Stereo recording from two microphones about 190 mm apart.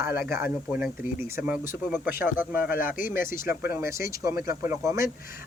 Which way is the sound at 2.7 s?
50° left (ahead or behind).